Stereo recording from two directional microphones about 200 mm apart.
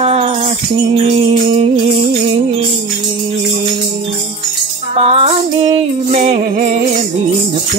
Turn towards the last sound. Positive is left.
turn(degrees=-35)  # may be behind; listen again after turning